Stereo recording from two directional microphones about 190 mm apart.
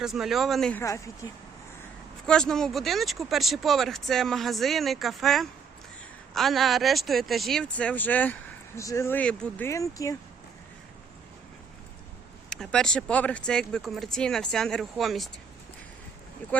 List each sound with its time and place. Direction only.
0.0 s speech: centre (ahead or behind)
0.8 s speech: 15° left (ahead or behind)
2.2 s speech: 5° left (ahead or behind)
12.5 s speech: 5° left (ahead or behind)